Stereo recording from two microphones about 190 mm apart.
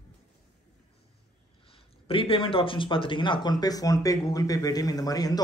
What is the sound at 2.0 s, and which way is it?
Speech, 30° left (ahead or behind).